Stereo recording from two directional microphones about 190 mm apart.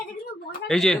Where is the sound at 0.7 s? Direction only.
5° left (ahead or behind).